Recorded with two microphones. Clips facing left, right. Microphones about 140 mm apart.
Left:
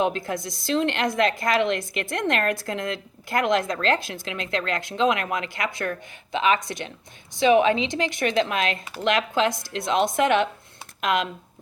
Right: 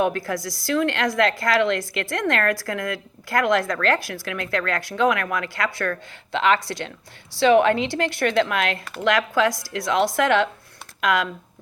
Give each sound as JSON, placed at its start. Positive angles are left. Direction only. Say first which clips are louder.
{"t": 0.0, "sound": "a woman's voice", "louder": "right 2 dB", "side_deg": 20}